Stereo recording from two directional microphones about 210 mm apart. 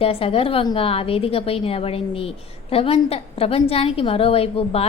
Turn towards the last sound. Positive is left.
turn(degrees=30)  # may be behind; listen again after turning